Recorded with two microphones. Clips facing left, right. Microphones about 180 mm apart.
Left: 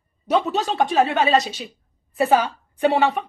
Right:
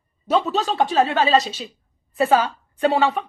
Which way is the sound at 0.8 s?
15° left (ahead or behind).